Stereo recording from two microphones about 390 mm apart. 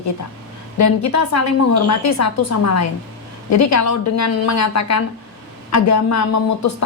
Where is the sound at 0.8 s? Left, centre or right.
Left.